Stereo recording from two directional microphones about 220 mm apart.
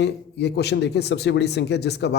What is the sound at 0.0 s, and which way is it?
Speech, 50° left (ahead or behind).